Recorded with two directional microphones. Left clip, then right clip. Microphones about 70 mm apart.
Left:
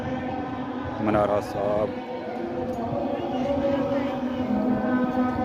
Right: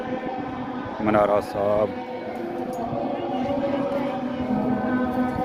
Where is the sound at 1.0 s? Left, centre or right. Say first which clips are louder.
Right 3 dB; right.